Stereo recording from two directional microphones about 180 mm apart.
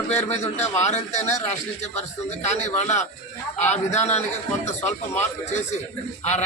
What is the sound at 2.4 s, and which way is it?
A man's voice, 40° left (ahead or behind).